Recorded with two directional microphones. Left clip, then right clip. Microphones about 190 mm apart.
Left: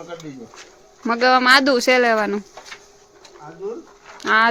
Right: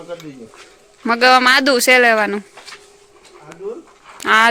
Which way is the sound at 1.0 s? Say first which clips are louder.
Right 4 dB; 5° right (ahead or behind).